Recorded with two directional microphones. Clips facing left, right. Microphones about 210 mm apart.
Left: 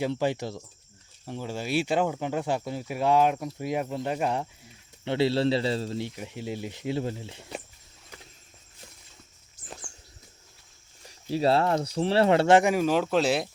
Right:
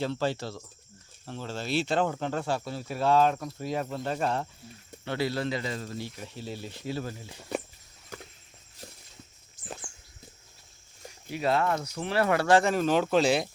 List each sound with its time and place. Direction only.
0.0 s speech: 15° left (ahead or behind)
5.0 s speech: 25° left (ahead or behind)
11.1 s speech: 30° left (ahead or behind); by 13.5 s centre (ahead or behind)